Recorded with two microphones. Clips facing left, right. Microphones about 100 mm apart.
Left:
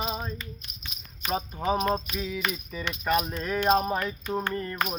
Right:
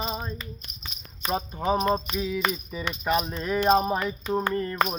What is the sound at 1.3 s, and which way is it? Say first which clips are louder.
Speech: right 2 dB; centre (ahead or behind).